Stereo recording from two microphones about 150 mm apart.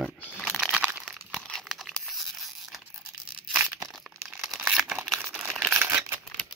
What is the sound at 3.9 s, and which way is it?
Crumpling, centre (ahead or behind).